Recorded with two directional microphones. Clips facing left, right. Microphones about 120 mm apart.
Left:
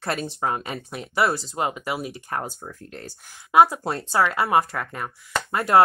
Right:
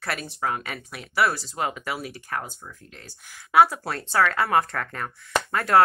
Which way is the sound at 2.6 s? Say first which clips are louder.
Left 7 dB; 45° left (ahead or behind).